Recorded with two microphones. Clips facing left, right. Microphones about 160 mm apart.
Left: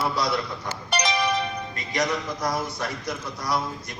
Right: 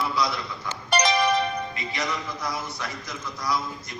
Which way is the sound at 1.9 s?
45° left (ahead or behind).